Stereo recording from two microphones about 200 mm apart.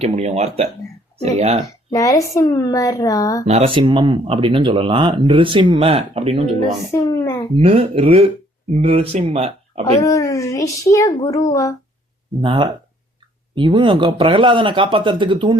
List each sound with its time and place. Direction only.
0.0 s speech: 30° right (ahead or behind)
1.6 s a woman's voice: 15° left (ahead or behind)
3.4 s speech: 30° right (ahead or behind)
6.9 s a woman's voice: 15° left (ahead or behind)
7.5 s speech: 30° right (ahead or behind)
10.0 s a woman's voice: 15° left (ahead or behind)
12.4 s speech: 25° right (ahead or behind)